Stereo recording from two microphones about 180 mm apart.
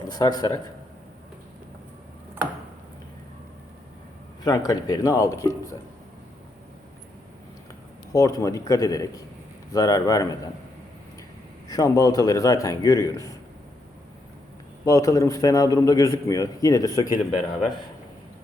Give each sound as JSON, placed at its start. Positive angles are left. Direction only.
{"t": 0.1, "sound": "a man's voice", "side_deg": 20}
{"t": 4.4, "sound": "a man's voice", "side_deg": 20}
{"t": 8.1, "sound": "a man's voice", "side_deg": 15}
{"t": 11.7, "sound": "a man's voice", "side_deg": 20}
{"t": 14.8, "sound": "a man's voice", "side_deg": 20}